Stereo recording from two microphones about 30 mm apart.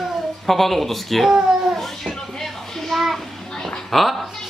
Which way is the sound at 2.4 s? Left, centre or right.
Centre.